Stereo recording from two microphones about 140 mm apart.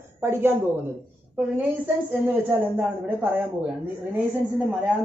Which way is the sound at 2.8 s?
10° right (ahead or behind).